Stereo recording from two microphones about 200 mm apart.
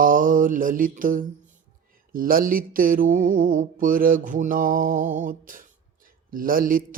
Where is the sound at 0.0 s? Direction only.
40° right (ahead or behind).